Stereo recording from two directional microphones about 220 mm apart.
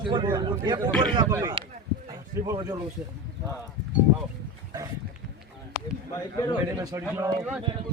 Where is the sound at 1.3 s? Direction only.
15° right (ahead or behind).